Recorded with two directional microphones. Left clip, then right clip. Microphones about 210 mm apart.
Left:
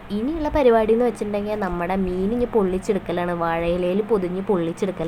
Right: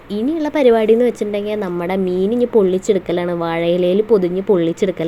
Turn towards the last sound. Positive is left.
turn(degrees=-20)  # may be behind; listen again after turning